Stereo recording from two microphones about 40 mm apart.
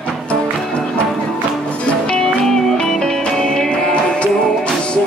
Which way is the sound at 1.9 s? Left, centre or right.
Left.